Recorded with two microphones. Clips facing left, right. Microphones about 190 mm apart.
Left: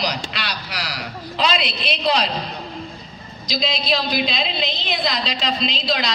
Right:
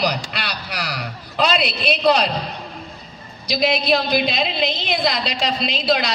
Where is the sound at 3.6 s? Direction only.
55° right (ahead or behind).